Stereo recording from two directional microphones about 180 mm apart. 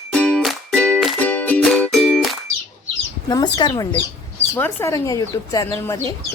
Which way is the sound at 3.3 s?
25° left (ahead or behind).